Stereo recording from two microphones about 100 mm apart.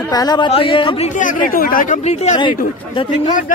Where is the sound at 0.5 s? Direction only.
60° left (ahead or behind).